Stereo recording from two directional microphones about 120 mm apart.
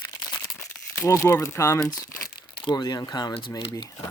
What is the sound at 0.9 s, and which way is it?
Speech, 25° left (ahead or behind).